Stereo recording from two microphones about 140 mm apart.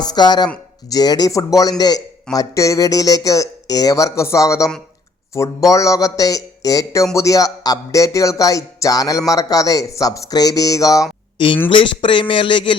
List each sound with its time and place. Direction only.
0.0 s speech: 30° left (ahead or behind)
11.3 s speech: 35° left (ahead or behind)